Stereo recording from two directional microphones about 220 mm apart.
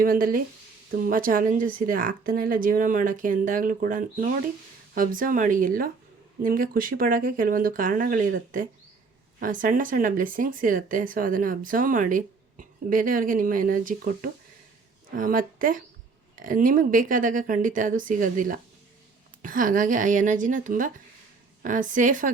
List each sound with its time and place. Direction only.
0.0 s speech: 40° right (ahead or behind)